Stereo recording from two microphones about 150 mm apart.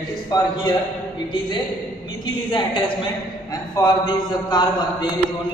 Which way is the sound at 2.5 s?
35° left (ahead or behind).